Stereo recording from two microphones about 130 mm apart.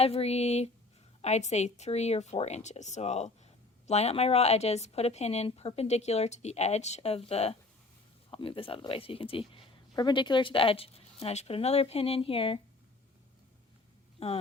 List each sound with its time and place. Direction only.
0.0 s a woman's voice: 50° left (ahead or behind)
14.2 s speech: 50° left (ahead or behind)